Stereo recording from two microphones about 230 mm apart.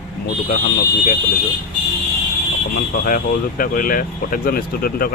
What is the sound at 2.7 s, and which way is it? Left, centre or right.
Speech, left.